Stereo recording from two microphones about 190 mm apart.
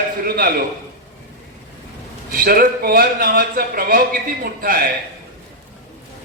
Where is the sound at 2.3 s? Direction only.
50° right (ahead or behind).